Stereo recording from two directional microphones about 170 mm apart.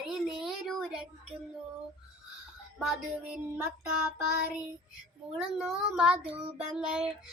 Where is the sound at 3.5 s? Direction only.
10° right (ahead or behind).